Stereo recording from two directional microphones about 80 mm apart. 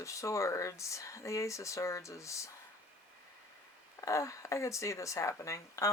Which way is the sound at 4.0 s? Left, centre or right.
Left.